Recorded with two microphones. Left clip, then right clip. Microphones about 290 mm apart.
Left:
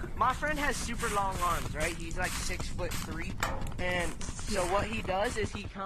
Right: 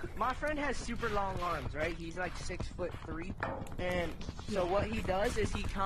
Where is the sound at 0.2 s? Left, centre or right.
Left.